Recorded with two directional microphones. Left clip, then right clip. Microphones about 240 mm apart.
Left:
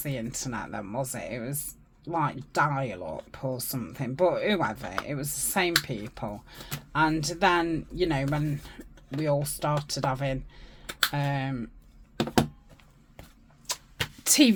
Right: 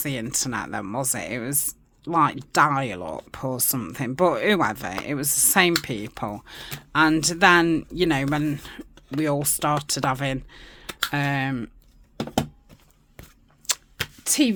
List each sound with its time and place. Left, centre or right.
0.0 s speech: right
13.7 s arrow: right
14.3 s speech: centre